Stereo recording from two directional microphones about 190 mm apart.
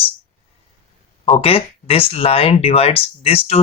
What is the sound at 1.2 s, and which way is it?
Speech, 30° left (ahead or behind).